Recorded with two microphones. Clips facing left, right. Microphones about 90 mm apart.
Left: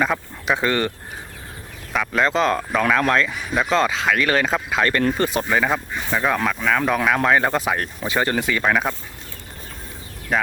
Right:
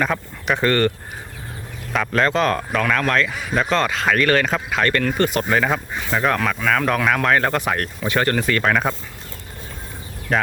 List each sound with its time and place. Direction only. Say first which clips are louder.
0.0 s speech: even; 5° left (ahead or behind)
4.8 s speech: right 1 dB; 20° left (ahead or behind)
5.5 s speech: right 1 dB; 5° left (ahead or behind)
10.3 s speech: right 1 dB; centre (ahead or behind)